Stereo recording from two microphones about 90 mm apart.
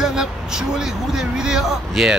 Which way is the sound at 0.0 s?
5° right (ahead or behind).